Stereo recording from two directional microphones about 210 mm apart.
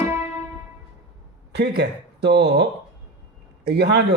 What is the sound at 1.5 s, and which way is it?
Speech, 50° right (ahead or behind).